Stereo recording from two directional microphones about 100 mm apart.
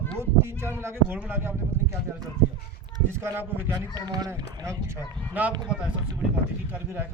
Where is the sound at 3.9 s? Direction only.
40° right (ahead or behind).